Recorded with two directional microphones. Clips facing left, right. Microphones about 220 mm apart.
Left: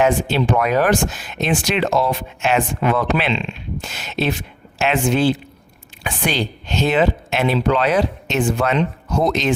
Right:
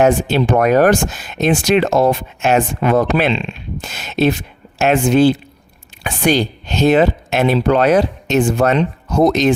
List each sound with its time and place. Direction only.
0.0 s speech: 45° right (ahead or behind)